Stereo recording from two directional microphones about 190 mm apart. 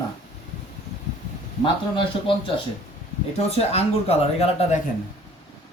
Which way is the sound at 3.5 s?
30° left (ahead or behind).